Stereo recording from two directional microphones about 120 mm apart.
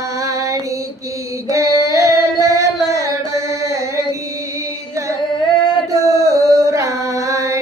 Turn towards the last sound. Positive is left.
turn(degrees=-25)  # may be behind; listen again after turning